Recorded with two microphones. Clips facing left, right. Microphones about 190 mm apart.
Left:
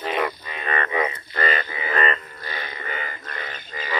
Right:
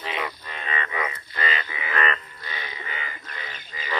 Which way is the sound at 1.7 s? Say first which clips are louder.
Left 3 dB; 35° left (ahead or behind).